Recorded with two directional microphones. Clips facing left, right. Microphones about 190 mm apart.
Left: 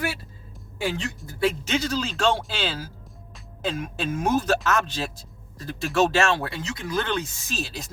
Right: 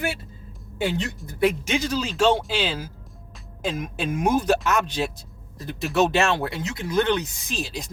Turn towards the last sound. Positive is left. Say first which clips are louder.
# right 1 dB
turn(degrees=-15)  # may be behind; listen again after turning